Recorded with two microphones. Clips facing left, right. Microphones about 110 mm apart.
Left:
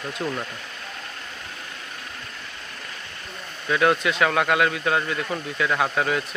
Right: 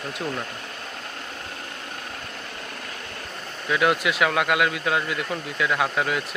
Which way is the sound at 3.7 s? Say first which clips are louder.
Left 1 dB; 5° right (ahead or behind).